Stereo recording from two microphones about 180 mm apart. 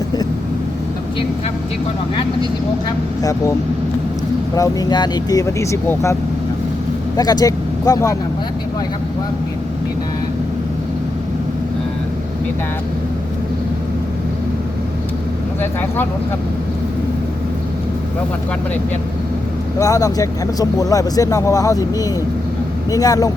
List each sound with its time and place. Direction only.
4.5 s speech: 20° left (ahead or behind)
7.2 s speech: 20° left (ahead or behind)
19.8 s speech: 20° left (ahead or behind)